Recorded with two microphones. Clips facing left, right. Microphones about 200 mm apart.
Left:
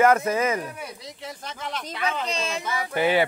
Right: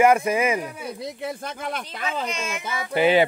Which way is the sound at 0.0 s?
10° right (ahead or behind).